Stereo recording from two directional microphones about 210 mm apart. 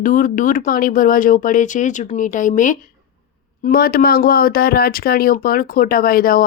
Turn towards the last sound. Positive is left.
turn(degrees=45)  # may be behind; listen again after turning